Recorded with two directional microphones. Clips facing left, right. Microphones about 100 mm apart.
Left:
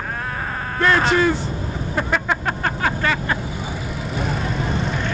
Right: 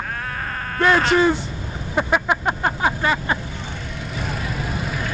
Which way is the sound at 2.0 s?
10° right (ahead or behind).